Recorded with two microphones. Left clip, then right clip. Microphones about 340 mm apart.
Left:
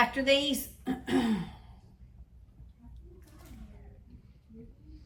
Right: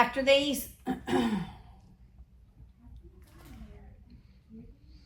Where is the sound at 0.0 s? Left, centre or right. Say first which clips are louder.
Right 2 dB; centre.